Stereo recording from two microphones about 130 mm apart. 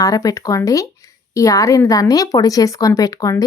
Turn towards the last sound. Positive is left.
turn(degrees=25)  # may be behind; listen again after turning